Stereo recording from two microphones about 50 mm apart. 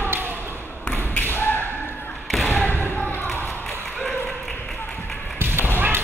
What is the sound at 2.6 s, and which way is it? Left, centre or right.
Basketball bounce, left.